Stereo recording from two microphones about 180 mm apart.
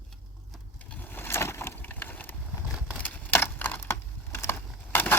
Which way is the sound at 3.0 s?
10° left (ahead or behind).